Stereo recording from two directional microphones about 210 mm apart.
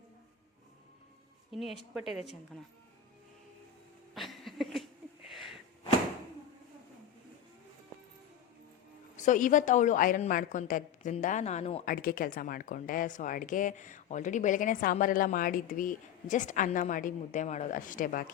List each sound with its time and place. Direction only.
1.5 s a woman's voice: centre (ahead or behind)
4.1 s a sound: centre (ahead or behind)
9.1 s speech: 35° left (ahead or behind)
11.9 s speech: 40° left (ahead or behind)